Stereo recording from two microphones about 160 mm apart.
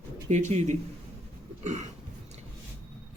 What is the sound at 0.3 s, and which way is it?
Speech, 45° right (ahead or behind).